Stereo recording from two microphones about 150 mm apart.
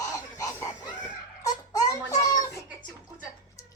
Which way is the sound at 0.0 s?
20° left (ahead or behind).